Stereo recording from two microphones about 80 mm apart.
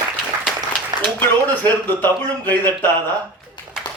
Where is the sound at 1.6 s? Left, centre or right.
Left.